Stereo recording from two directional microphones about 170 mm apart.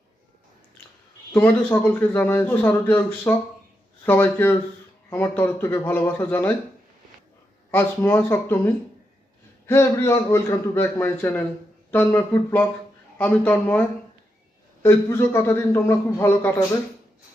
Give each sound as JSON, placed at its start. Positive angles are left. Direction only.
{"t": 1.3, "sound": "a man's voice", "side_deg": 10}
{"t": 7.7, "sound": "a man's voice", "side_deg": 15}